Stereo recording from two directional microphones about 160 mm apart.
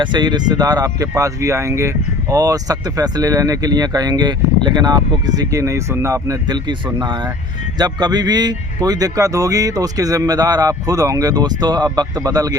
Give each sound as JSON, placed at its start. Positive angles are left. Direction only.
{"t": 0.0, "sound": "speech", "side_deg": -30}